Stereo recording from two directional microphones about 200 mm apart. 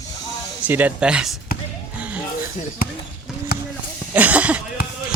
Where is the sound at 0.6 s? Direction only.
10° right (ahead or behind).